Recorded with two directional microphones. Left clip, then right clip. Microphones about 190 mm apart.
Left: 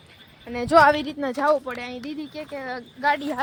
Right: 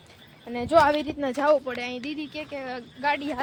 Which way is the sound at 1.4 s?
Centre (ahead or behind).